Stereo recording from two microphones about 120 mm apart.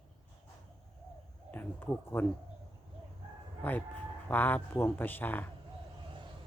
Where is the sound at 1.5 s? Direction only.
15° left (ahead or behind).